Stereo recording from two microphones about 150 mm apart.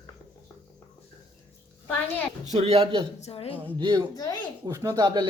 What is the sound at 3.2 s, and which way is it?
Speech, 40° left (ahead or behind).